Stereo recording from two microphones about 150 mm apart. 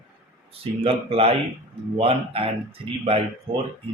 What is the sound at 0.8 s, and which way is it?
Speech, 40° right (ahead or behind).